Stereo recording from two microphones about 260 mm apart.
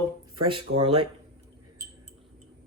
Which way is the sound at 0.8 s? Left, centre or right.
Right.